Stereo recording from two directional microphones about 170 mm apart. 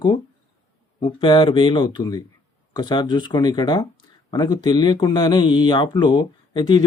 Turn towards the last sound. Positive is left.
turn(degrees=25)  # may be behind; listen again after turning